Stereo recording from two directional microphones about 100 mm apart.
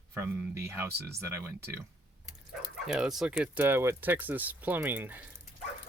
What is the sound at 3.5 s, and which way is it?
Speech, 20° right (ahead or behind).